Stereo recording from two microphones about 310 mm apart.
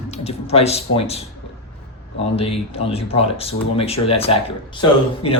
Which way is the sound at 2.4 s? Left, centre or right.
Centre.